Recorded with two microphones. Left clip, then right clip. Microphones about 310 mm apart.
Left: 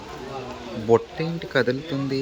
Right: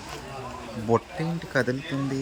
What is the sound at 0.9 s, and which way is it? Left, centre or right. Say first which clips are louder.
Speech: left 5 dB; centre.